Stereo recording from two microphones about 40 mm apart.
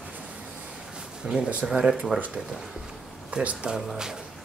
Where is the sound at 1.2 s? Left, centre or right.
Right.